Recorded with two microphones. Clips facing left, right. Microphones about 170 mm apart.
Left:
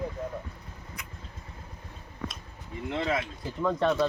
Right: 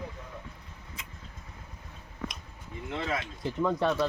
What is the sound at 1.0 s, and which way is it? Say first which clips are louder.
Vehicle: left 2 dB; 25° right (ahead or behind).